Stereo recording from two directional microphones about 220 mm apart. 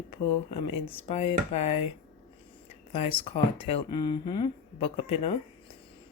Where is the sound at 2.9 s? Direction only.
25° left (ahead or behind).